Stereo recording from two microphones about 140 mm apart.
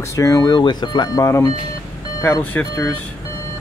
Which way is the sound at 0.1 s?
20° left (ahead or behind).